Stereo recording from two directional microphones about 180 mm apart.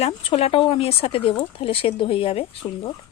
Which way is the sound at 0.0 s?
30° left (ahead or behind).